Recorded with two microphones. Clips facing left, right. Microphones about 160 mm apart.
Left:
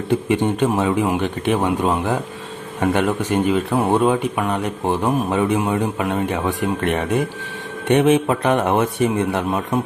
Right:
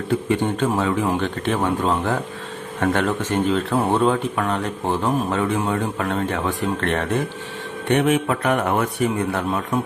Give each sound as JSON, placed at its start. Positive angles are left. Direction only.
{"t": 0.1, "sound": "a man's voice", "side_deg": 20}